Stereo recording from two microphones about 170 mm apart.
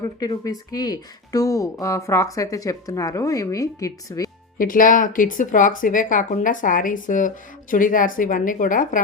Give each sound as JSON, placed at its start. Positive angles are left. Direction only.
{"t": 0.0, "sound": "speech", "side_deg": 25}
{"t": 4.5, "sound": "speech", "side_deg": 55}